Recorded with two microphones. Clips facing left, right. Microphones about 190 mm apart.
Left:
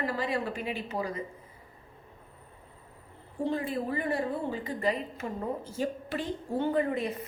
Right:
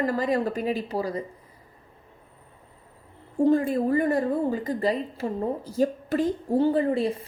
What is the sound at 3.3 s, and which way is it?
A woman's voice, 45° right (ahead or behind).